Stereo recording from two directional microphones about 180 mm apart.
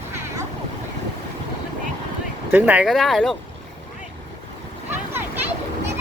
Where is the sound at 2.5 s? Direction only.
10° right (ahead or behind).